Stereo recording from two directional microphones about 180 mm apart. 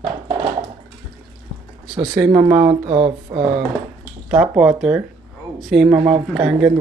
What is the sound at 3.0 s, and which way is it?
Speech, 25° right (ahead or behind).